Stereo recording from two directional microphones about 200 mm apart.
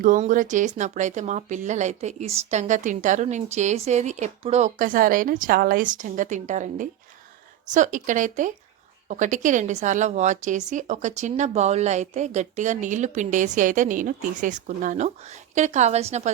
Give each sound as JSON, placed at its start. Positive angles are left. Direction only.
{"t": 0.0, "sound": "a woman's voice", "side_deg": -40}